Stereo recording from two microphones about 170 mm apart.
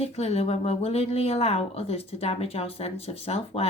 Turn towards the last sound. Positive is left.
turn(degrees=35)  # may be behind; listen again after turning